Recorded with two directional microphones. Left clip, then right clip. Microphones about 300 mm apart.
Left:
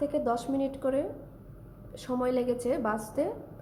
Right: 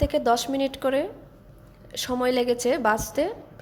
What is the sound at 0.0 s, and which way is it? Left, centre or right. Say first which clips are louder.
A woman's voice: right 7 dB; centre.